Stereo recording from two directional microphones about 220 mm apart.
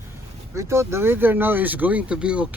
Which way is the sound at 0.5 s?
10° right (ahead or behind).